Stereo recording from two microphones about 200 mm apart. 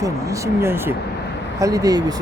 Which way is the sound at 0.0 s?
15° right (ahead or behind).